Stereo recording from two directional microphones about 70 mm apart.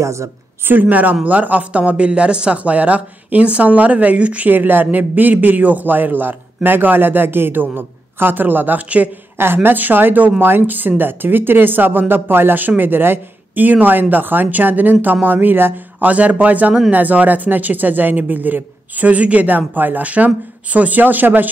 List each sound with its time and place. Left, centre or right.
0.0 s a woman's voice: right
0.7 s speech: right
9.4 s speech: right